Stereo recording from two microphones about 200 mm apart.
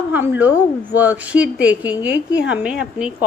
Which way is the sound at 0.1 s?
10° right (ahead or behind).